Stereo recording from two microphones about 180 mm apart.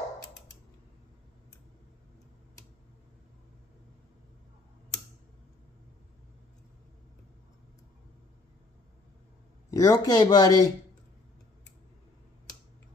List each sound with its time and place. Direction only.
9.7 s speech: 20° left (ahead or behind)